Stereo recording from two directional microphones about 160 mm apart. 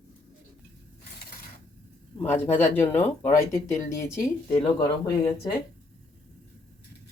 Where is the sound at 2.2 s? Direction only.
10° left (ahead or behind).